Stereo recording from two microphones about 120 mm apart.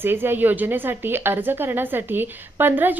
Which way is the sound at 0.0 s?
20° right (ahead or behind).